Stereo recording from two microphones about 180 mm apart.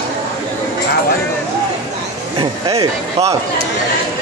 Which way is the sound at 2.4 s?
20° right (ahead or behind).